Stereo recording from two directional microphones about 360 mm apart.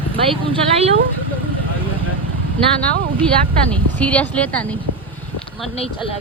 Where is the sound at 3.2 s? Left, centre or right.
Centre.